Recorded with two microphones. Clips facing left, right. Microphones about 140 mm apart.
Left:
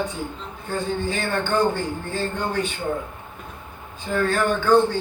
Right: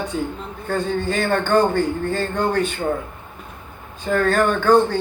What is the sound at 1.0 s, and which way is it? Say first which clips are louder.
A man's voice: right 4 dB; 50° right (ahead or behind).